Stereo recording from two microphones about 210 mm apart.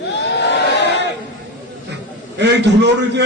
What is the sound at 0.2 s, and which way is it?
Chatter, 55° left (ahead or behind).